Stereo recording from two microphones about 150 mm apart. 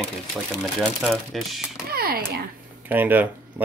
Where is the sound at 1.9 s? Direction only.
90° right.